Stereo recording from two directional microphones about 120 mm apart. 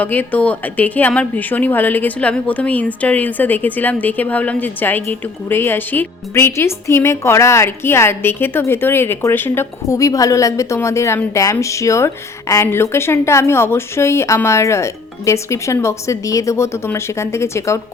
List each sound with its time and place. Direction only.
0.0 s a woman's voice: 15° left (ahead or behind)